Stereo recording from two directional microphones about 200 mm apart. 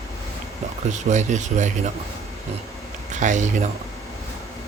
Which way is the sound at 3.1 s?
40° right (ahead or behind).